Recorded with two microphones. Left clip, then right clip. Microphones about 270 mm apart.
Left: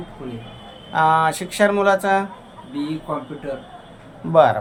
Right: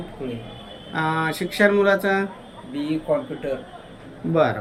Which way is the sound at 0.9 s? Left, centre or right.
Left.